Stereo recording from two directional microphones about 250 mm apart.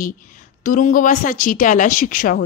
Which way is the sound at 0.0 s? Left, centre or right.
Left.